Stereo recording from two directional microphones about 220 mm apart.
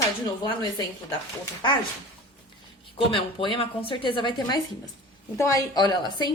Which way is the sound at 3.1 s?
25° left (ahead or behind).